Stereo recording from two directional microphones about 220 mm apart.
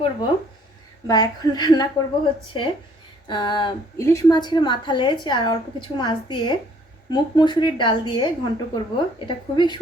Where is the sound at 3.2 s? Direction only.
20° left (ahead or behind).